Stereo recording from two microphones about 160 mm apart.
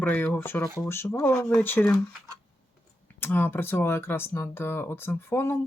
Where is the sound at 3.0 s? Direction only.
10° left (ahead or behind).